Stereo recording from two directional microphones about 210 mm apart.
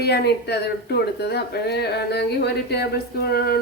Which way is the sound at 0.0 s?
50° left (ahead or behind).